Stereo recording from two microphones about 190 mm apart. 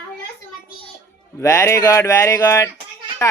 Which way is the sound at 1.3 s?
15° left (ahead or behind).